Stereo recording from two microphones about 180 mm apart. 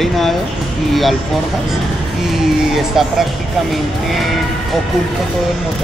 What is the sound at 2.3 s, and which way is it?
Speech, centre (ahead or behind).